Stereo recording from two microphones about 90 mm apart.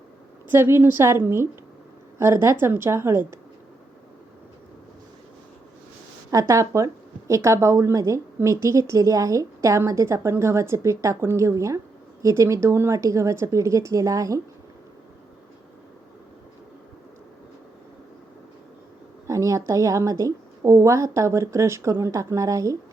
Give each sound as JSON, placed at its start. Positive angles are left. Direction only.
{"t": 0.4, "sound": "a woman's voice", "side_deg": -25}
{"t": 6.5, "sound": "a woman's voice", "side_deg": -35}
{"t": 19.3, "sound": "a woman's voice", "side_deg": -35}